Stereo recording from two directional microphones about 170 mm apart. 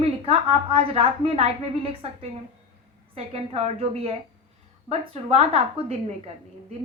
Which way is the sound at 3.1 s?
35° right (ahead or behind).